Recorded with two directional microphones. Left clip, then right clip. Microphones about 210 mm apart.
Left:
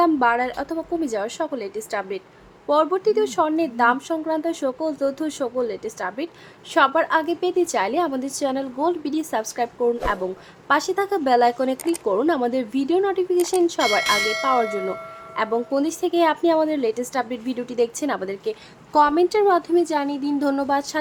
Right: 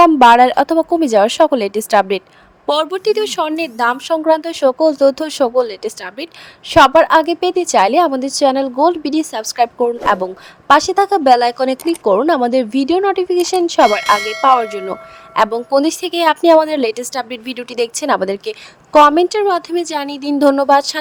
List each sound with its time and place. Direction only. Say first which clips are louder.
0.0 s a woman's voice: right 12 dB; 40° right (ahead or behind)
13.8 s speech: right 7 dB; centre (ahead or behind)
15.4 s a woman's voice: right 9 dB; 30° right (ahead or behind)